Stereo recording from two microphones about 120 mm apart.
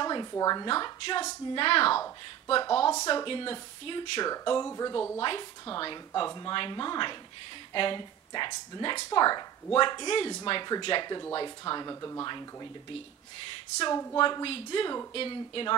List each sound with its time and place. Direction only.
0.0 s a sound: 35° left (ahead or behind)
0.3 s speech: 30° left (ahead or behind)
0.7 s a woman's voice: 40° left (ahead or behind)
4.3 s speech: 35° left (ahead or behind)
5.2 s a woman's voice: 45° left (ahead or behind)
13.7 s speech: 30° left (ahead or behind)
14.2 s a woman's voice: 45° left (ahead or behind)